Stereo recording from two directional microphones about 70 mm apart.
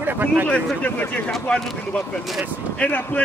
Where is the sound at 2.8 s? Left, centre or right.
Left.